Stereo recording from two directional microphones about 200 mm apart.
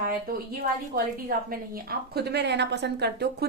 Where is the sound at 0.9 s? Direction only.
50° right (ahead or behind).